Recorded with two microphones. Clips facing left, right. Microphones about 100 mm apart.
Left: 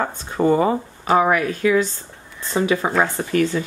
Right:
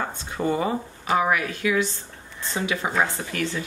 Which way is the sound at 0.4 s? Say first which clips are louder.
Left 7 dB; 50° left (ahead or behind).